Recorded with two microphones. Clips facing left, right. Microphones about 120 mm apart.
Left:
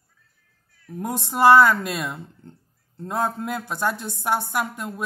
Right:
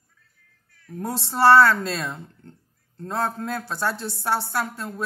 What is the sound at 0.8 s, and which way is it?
Speech, 15° left (ahead or behind).